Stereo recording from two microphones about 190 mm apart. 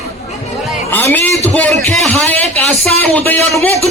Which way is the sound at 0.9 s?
10° left (ahead or behind).